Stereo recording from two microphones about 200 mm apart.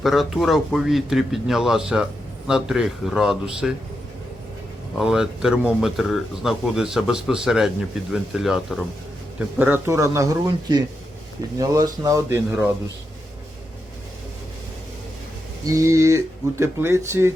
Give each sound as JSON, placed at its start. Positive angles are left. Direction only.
{"t": 0.0, "sound": "speech", "side_deg": 0}
{"t": 4.9, "sound": "speech", "side_deg": -5}
{"t": 15.6, "sound": "speech", "side_deg": -15}